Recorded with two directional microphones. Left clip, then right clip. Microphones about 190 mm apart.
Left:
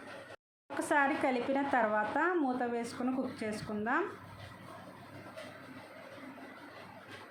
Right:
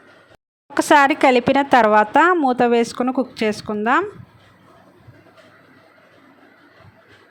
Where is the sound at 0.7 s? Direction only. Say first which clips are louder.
Right 17 dB; 50° right (ahead or behind).